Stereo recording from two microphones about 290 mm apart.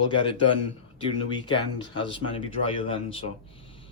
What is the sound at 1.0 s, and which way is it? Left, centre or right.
Speech, centre.